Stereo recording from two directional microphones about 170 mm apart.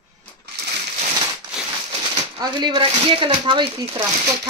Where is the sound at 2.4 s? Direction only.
25° right (ahead or behind).